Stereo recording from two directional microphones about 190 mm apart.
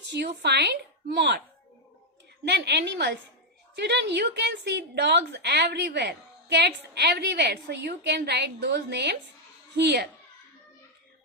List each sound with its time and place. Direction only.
0.1 s a woman's voice: 60° right (ahead or behind)
2.4 s a woman's voice: 60° right (ahead or behind)